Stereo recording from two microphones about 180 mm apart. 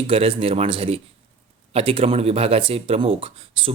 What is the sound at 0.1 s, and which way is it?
Speech, 30° right (ahead or behind).